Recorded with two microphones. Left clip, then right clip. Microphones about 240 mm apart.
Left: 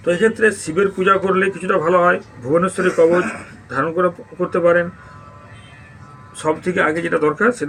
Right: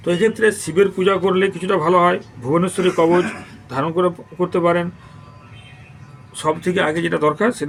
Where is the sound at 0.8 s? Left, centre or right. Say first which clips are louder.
Even; right.